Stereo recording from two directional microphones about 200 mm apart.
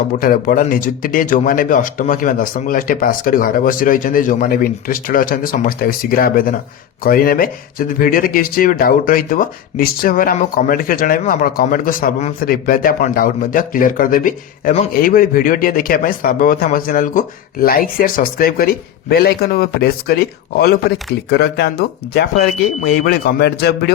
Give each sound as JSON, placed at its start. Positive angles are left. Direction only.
{"t": 0.2, "sound": "speech", "side_deg": 45}